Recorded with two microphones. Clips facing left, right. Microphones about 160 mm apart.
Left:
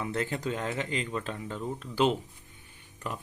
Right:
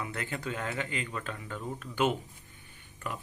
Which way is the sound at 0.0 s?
30° left (ahead or behind).